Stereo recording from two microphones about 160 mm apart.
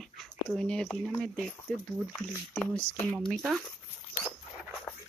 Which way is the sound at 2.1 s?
10° left (ahead or behind).